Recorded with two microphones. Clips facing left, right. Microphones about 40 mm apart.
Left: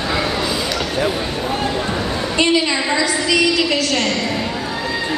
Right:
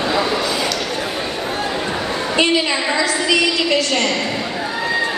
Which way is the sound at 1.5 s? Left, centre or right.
Centre.